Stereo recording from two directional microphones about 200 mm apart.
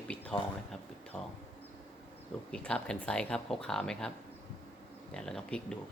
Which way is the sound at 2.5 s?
5° left (ahead or behind).